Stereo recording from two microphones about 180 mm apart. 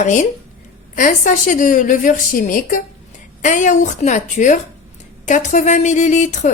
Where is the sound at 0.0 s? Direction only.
40° left (ahead or behind).